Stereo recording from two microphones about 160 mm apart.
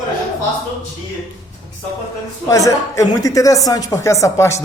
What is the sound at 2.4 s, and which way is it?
Speech, 20° left (ahead or behind).